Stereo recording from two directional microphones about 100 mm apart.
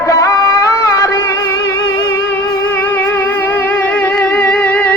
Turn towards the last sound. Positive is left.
turn(degrees=15)  # may be behind; listen again after turning